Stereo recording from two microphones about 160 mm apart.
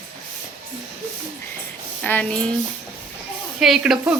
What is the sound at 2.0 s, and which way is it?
Speech, 10° left (ahead or behind).